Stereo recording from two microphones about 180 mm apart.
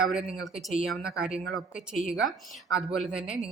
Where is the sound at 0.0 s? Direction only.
5° right (ahead or behind).